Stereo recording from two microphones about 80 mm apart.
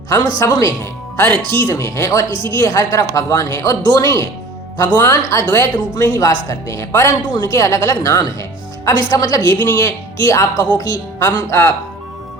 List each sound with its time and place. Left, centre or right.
0.1 s speech: left
9.5 s speech: left